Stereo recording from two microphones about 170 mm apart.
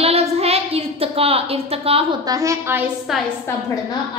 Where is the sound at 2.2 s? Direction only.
20° right (ahead or behind).